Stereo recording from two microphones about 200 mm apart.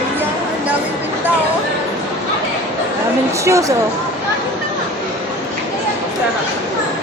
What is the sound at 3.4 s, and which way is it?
Speech, 15° right (ahead or behind).